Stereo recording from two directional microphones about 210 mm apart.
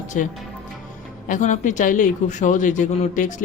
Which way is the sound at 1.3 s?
35° left (ahead or behind).